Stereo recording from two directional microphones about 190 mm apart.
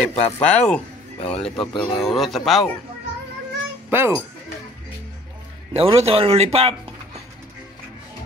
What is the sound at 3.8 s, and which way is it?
Speech, 10° right (ahead or behind).